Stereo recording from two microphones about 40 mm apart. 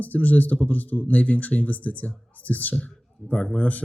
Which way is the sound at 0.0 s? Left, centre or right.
Left.